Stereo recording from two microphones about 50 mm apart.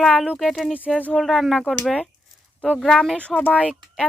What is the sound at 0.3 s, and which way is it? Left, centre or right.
Speech, centre.